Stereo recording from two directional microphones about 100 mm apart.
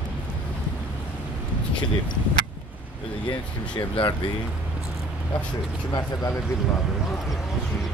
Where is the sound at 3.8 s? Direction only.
50° left (ahead or behind).